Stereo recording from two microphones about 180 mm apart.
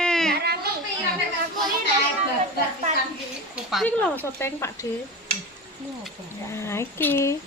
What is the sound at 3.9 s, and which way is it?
Speech, 10° left (ahead or behind).